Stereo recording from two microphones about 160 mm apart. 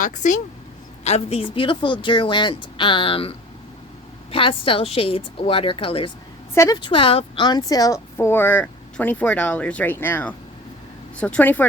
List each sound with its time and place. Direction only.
0.0 s a woman's voice: 50° left (ahead or behind)
1.0 s speech: 40° left (ahead or behind)
6.5 s a woman's voice: 15° left (ahead or behind)
6.7 s speech: 30° left (ahead or behind); by 11.7 s 10° left (ahead or behind)